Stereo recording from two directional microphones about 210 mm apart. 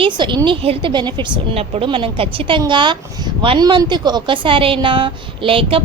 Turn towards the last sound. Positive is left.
turn(degrees=-25)  # may be behind; listen again after turning